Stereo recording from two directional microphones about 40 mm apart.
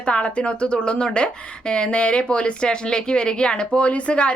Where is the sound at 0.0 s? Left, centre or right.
Left.